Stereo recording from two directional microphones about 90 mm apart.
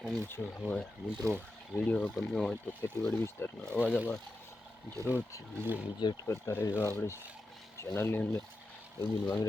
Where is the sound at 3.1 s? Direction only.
25° left (ahead or behind).